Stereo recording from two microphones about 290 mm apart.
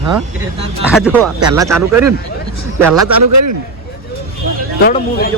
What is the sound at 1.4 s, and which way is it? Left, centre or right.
Speech, centre.